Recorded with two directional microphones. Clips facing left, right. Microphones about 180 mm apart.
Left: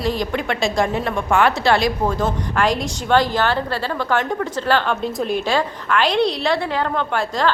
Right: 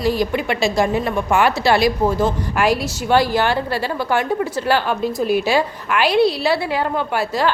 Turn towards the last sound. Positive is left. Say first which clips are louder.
# right 1 dB
turn(degrees=-10)  # may be behind; listen again after turning